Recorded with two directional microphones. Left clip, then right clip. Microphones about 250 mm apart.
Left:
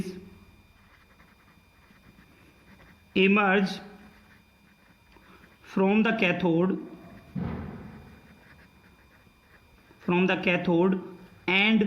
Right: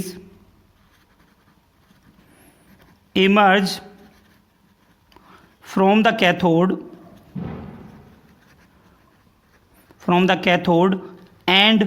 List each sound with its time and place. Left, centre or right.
3.1 s speech: right
5.6 s speech: right
10.0 s speech: right